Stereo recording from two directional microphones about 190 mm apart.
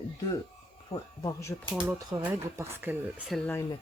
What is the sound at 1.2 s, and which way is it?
Speech, 15° left (ahead or behind).